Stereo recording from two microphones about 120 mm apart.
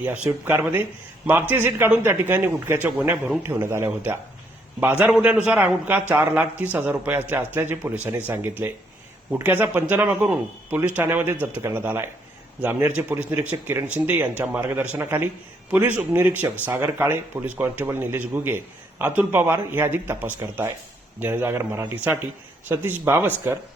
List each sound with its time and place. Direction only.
0.0 s speech: 15° right (ahead or behind)